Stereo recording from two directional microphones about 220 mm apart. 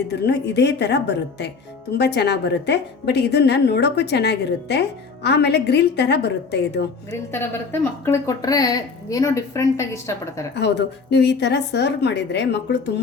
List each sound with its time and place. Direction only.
0.1 s a woman's voice: 50° left (ahead or behind)
7.1 s speech: 10° left (ahead or behind)
10.5 s a woman's voice: 50° left (ahead or behind)